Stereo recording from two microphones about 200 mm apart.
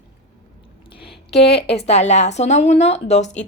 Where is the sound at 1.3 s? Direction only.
30° left (ahead or behind).